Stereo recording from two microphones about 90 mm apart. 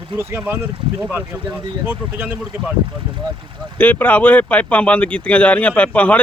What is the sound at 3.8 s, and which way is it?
A man's voice, 20° left (ahead or behind).